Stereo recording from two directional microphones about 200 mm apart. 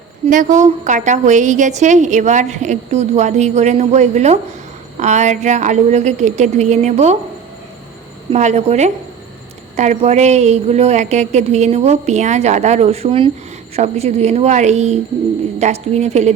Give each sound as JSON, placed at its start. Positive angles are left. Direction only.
{"t": 0.3, "sound": "a woman's voice", "side_deg": -40}
{"t": 8.3, "sound": "a woman's voice", "side_deg": -35}